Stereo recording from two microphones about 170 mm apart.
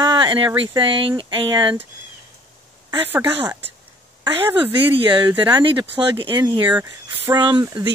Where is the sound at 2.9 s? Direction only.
10° right (ahead or behind).